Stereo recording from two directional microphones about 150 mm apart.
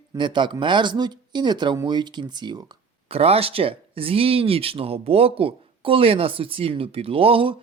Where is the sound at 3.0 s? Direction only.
40° right (ahead or behind).